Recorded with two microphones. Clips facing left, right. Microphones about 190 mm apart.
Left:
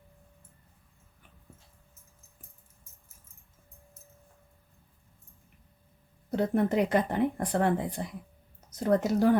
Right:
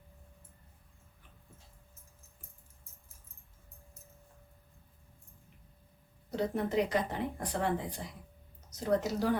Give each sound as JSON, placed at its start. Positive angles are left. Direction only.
{"t": 6.3, "sound": "speech", "side_deg": 55}